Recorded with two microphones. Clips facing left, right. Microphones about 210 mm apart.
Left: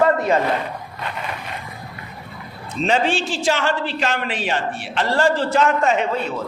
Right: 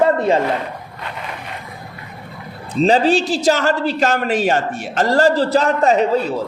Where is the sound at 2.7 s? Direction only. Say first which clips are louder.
Right 6 dB; 35° right (ahead or behind).